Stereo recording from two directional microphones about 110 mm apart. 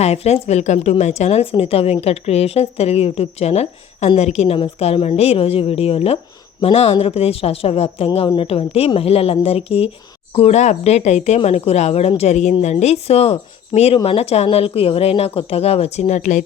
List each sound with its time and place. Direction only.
0.0 s a woman's voice: 70° left (ahead or behind)
10.3 s speech: 75° left (ahead or behind)
11.3 s a woman's voice: 70° left (ahead or behind); by 12.5 s 90° left
12.6 s a woman's voice: 80° left